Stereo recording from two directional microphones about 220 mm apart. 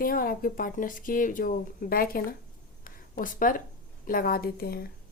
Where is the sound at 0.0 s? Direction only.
40° left (ahead or behind).